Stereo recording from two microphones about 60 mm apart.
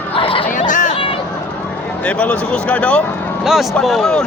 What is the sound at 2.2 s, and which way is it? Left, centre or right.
Speech, left.